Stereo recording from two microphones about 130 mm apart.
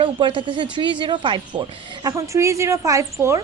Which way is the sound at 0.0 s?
40° right (ahead or behind).